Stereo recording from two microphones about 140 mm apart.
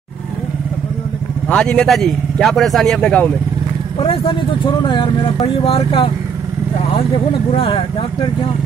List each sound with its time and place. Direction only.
1.5 s speech: 5° left (ahead or behind)
4.0 s speech: 40° left (ahead or behind)
7.5 s speech: 40° left (ahead or behind)